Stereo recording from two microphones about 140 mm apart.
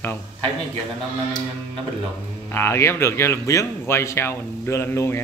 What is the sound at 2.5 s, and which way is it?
Speech, 20° left (ahead or behind).